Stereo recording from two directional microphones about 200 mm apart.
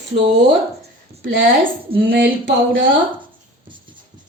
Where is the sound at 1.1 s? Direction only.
30° right (ahead or behind).